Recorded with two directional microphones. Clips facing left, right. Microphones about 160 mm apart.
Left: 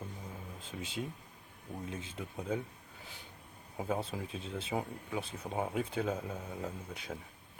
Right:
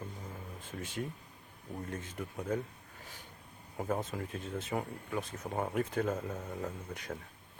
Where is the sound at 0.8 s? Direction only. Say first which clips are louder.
Right 1 dB; 15° left (ahead or behind).